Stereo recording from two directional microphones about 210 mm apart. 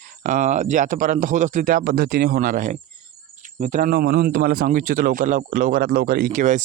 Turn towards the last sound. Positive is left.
turn(degrees=-35)  # may be behind; listen again after turning